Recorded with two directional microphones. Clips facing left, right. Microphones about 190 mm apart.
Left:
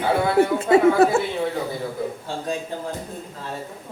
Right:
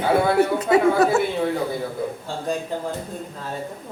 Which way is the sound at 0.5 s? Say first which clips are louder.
Left 2 dB; 25° left (ahead or behind).